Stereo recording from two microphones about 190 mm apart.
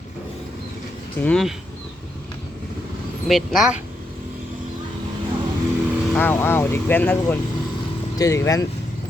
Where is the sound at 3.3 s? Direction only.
Centre (ahead or behind).